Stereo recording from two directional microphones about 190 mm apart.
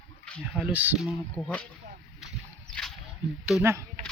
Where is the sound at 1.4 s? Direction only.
5° left (ahead or behind).